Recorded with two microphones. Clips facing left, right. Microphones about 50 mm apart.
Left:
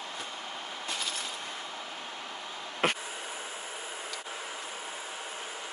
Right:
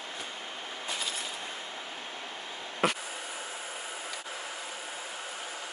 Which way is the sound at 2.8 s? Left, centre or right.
Left.